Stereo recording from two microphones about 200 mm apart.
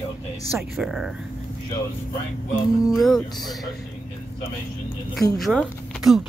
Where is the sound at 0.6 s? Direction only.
Centre (ahead or behind).